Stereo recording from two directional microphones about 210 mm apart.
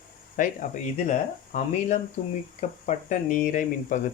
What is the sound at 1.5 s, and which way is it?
Speech, 35° left (ahead or behind).